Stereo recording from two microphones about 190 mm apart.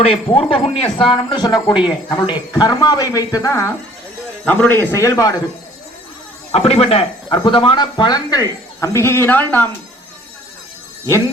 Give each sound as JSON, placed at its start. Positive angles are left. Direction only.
{"t": 0.0, "sound": "speech", "side_deg": 30}
{"t": 6.5, "sound": "speech", "side_deg": 30}